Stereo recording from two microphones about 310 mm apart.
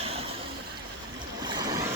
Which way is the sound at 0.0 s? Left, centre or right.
Centre.